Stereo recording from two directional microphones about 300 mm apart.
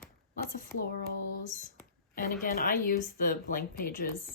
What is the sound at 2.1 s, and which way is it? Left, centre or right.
Speech, left.